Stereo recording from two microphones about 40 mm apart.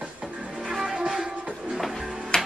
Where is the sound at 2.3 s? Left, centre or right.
Centre.